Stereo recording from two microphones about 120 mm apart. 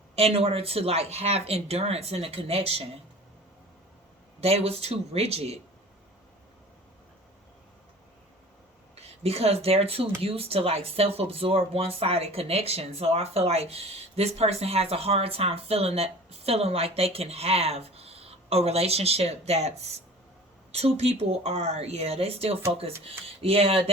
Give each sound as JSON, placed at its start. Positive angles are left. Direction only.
{"t": 0.2, "sound": "speech", "side_deg": -55}
{"t": 4.4, "sound": "speech", "side_deg": -55}
{"t": 9.0, "sound": "speech", "side_deg": -60}